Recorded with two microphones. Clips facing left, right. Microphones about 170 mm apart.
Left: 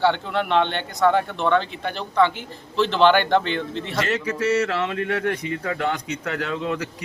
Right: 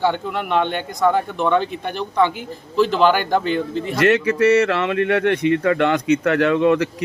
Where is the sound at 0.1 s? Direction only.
10° right (ahead or behind).